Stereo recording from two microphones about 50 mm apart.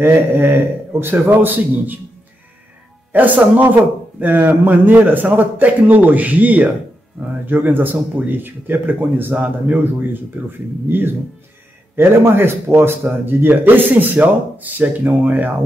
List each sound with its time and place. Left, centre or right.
0.0 s a man's voice: right
3.1 s a man's voice: right
9.3 s a man's voice: right
10.4 s a man's voice: right